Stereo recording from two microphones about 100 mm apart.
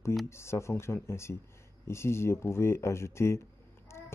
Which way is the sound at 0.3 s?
25° left (ahead or behind).